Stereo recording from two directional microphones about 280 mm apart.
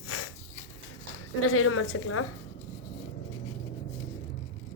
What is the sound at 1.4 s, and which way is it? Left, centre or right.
Speech, left.